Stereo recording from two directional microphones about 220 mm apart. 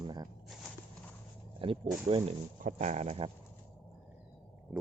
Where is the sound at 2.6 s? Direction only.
35° right (ahead or behind).